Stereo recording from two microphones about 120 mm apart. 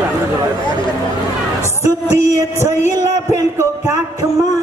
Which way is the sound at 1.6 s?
25° right (ahead or behind).